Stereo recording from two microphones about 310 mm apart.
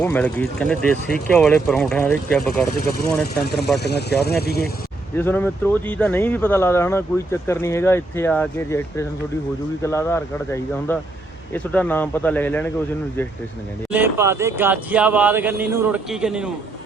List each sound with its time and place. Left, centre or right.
0.0 s speech: centre
3.8 s speech: left
5.1 s speech: centre
13.9 s speech: centre